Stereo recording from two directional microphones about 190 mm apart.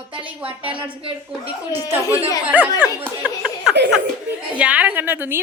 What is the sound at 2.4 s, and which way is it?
Speech, 5° right (ahead or behind).